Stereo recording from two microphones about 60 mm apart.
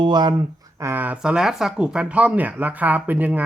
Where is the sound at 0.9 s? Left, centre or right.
Right.